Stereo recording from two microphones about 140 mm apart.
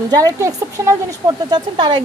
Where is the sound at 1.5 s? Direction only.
35° right (ahead or behind).